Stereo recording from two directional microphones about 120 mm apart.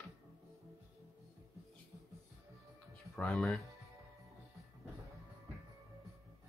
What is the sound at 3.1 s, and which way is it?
Speech, 5° left (ahead or behind).